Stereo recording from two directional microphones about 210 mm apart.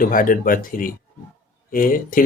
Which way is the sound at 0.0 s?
40° left (ahead or behind).